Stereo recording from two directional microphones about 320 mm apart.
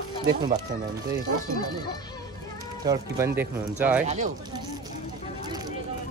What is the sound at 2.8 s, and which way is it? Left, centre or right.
Speech, centre.